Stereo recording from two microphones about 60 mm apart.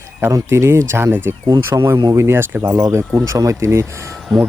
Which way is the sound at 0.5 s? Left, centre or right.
Right.